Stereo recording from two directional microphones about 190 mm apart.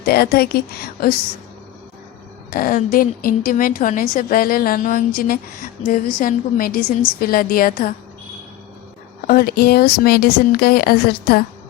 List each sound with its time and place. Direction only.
0.0 s a woman's voice: 55° left (ahead or behind)
2.5 s a woman's voice: 50° left (ahead or behind)
9.2 s a woman's voice: 55° left (ahead or behind)